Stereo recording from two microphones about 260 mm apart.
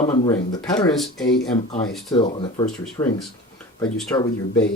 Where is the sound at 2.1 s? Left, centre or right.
Centre.